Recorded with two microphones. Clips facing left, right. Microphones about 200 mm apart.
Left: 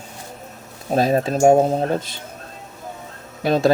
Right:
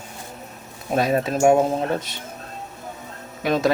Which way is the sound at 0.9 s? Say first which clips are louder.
Left 2 dB; 30° left (ahead or behind).